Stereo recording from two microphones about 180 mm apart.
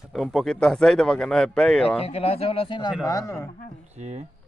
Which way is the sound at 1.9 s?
35° left (ahead or behind).